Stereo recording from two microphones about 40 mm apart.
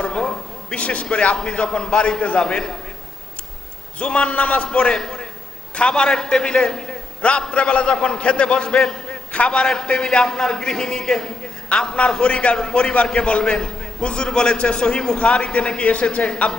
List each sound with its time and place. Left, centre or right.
0.0 s a sound: left
1.1 s a man's voice: left
3.9 s a man's voice: left
4.6 s a man's voice: left
7.2 s a man's voice: left
9.5 s a man's voice: left
11.7 s a man's voice: left
15.2 s a man's voice: left